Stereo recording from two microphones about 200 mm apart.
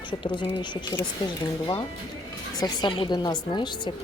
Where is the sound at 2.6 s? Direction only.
20° left (ahead or behind).